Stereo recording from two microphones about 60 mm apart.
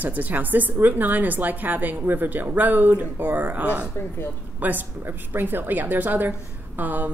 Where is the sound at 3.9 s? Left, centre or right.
Left.